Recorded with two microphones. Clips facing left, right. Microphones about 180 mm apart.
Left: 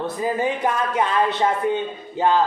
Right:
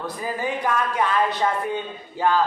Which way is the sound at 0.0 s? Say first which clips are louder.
Left 5 dB; 20° left (ahead or behind).